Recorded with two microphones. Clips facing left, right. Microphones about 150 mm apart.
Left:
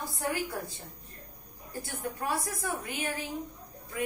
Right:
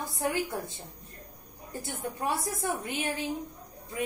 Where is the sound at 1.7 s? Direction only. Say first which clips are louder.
Right 1 dB; 25° right (ahead or behind).